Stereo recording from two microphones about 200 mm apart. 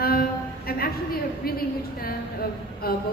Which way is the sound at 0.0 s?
50° left (ahead or behind).